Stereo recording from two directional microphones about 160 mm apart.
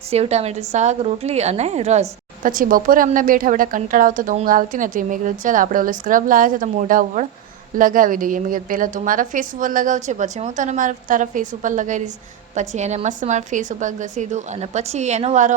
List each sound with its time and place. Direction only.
0.1 s a woman's voice: 40° right (ahead or behind)